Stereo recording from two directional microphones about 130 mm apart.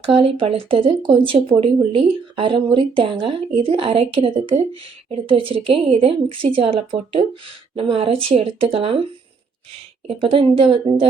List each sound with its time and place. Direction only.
0.0 s speech: 45° right (ahead or behind)
10.1 s speech: 45° right (ahead or behind)